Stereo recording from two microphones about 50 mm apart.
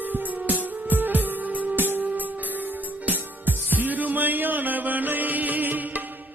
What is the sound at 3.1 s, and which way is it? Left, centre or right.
Music, right.